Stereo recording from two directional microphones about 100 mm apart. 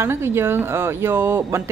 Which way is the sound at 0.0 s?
25° right (ahead or behind).